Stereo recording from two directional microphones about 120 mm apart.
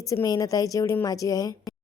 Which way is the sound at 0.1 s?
30° left (ahead or behind).